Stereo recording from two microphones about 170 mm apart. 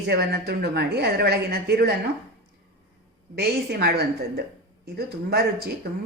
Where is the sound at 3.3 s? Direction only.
70° right (ahead or behind).